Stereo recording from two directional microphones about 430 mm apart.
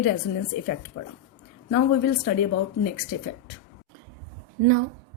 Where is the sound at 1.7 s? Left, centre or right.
Left.